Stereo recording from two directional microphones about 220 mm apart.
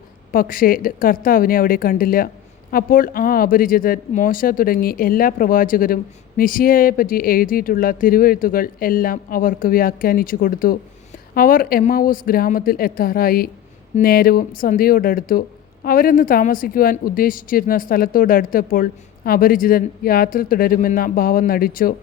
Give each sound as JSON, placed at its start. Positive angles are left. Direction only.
{"t": 0.3, "sound": "speech", "side_deg": 40}